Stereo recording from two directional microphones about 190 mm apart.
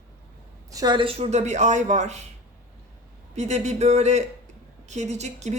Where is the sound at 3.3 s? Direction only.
35° right (ahead or behind).